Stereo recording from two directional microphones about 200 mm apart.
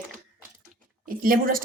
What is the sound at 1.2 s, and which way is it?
Speech, 45° right (ahead or behind).